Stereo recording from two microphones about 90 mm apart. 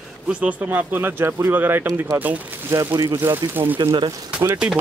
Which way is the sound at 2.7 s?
40° right (ahead or behind).